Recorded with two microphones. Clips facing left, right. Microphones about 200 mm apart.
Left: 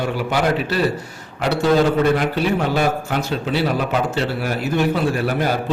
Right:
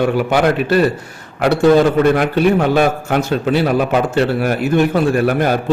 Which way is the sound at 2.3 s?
55° right (ahead or behind).